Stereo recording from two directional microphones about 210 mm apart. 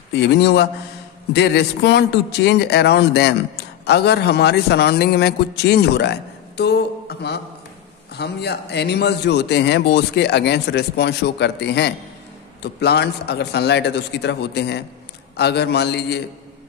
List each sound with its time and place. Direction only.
0.1 s a man's voice: 50° left (ahead or behind)